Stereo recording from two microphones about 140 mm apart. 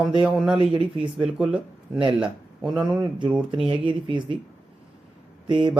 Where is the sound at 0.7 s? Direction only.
40° right (ahead or behind).